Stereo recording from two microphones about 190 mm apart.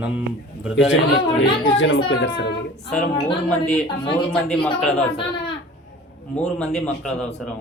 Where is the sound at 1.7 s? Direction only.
80° left.